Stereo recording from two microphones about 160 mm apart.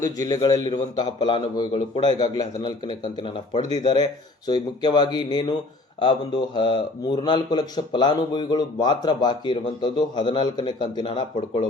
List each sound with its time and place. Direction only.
0.0 s a man's voice: 25° left (ahead or behind)